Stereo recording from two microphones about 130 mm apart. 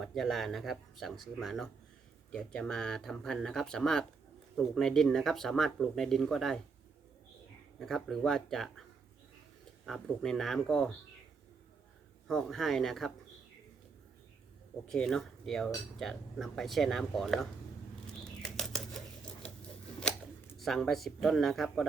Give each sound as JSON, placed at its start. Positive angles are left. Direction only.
{"t": 0.0, "sound": "speech", "side_deg": 0}
{"t": 7.8, "sound": "speech", "side_deg": 0}
{"t": 9.8, "sound": "speech", "side_deg": 5}
{"t": 12.3, "sound": "speech", "side_deg": 0}
{"t": 14.8, "sound": "speech", "side_deg": 5}
{"t": 18.4, "sound": "bird flight", "side_deg": 5}
{"t": 20.0, "sound": "speech", "side_deg": 10}